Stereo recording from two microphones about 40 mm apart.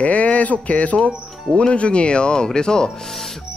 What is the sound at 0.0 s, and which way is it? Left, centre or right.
Speech, left.